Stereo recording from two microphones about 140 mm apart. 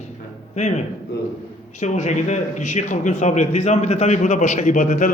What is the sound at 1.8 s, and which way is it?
A man's voice, 55° left (ahead or behind).